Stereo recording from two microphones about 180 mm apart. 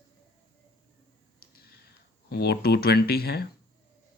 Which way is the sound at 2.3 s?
60° left (ahead or behind).